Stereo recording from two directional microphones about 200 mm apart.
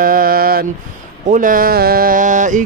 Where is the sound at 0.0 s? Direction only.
45° right (ahead or behind).